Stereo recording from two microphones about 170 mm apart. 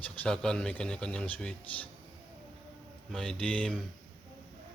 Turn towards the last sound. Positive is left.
turn(degrees=5)  # may be behind; listen again after turning